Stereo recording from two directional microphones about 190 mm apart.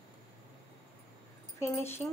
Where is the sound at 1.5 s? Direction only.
15° left (ahead or behind).